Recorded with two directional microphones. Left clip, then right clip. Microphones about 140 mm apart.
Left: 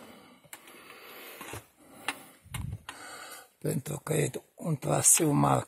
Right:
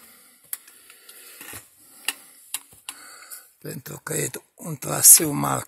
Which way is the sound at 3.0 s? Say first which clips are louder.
Even; 20° left (ahead or behind).